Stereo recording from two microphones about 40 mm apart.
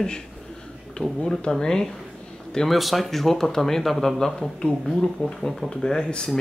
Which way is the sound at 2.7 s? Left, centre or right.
Centre.